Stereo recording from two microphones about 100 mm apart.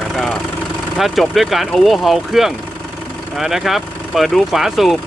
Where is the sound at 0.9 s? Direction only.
Centre (ahead or behind).